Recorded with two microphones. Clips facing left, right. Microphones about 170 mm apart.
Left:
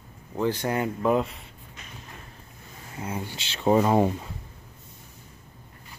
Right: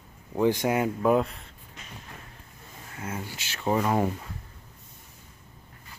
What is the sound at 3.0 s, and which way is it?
Speech, 20° left (ahead or behind).